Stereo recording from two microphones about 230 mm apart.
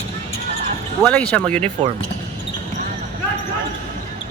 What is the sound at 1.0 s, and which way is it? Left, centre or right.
Speech, centre.